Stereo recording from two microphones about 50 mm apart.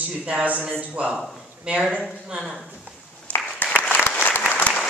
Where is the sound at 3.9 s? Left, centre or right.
Left.